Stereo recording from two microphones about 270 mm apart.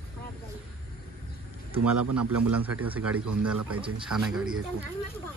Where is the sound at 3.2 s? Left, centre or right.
Right.